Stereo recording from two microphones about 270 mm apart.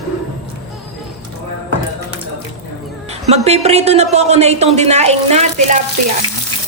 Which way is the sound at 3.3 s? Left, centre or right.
Right.